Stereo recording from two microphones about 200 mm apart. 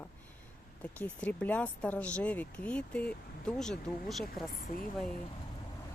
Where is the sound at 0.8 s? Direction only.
10° left (ahead or behind).